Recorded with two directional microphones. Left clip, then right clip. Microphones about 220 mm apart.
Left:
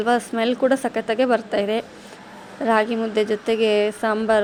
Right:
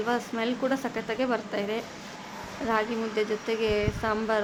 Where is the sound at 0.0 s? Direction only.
25° left (ahead or behind).